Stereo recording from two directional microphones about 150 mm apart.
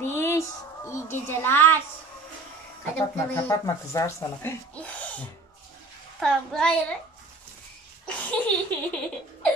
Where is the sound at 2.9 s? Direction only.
10° left (ahead or behind).